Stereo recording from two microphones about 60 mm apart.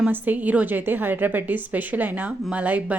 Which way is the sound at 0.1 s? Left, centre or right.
Right.